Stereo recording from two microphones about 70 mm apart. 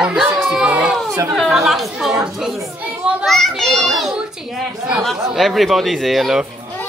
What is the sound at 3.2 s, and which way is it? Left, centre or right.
Speech, centre.